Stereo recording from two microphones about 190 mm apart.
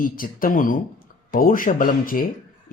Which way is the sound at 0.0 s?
45° left (ahead or behind).